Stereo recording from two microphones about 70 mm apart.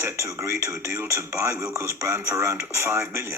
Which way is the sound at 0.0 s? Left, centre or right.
Right.